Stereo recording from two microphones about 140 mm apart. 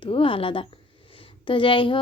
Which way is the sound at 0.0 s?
40° left (ahead or behind).